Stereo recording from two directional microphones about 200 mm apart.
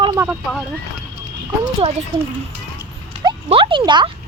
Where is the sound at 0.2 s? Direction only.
5° right (ahead or behind).